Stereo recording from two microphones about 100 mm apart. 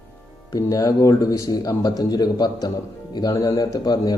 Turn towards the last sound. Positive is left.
turn(degrees=40)  # may be behind; listen again after turning